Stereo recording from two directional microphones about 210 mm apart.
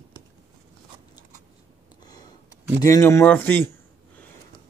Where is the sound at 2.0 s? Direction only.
20° left (ahead or behind).